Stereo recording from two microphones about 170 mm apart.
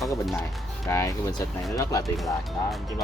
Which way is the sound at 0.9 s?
20° left (ahead or behind).